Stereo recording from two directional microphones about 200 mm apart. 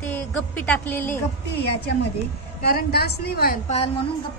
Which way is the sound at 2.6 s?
50° left (ahead or behind).